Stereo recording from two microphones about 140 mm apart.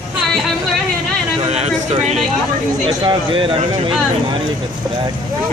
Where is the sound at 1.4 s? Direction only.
50° right (ahead or behind).